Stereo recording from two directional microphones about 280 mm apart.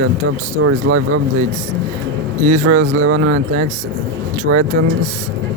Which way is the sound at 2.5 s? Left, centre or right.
Right.